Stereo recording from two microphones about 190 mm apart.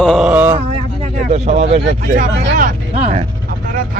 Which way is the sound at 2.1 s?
45° right (ahead or behind).